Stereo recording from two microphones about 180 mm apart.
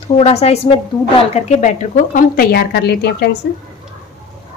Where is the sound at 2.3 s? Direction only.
65° left (ahead or behind).